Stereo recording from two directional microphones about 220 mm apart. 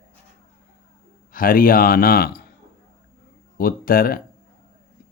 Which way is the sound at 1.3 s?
40° left (ahead or behind).